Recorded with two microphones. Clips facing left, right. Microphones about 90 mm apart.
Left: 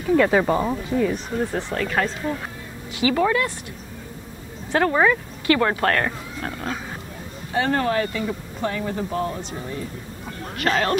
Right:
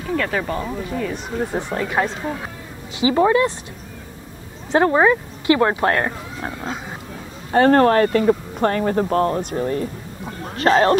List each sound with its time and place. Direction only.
0.2 s speech: 20° left (ahead or behind)
0.9 s speech: 5° left (ahead or behind)
1.5 s speech: 20° right (ahead or behind)
4.7 s speech: 25° right (ahead or behind)
7.5 s speech: 50° right (ahead or behind)
10.5 s speech: 30° right (ahead or behind)